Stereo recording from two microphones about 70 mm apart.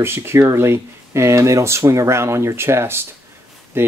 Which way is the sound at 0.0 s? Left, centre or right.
Right.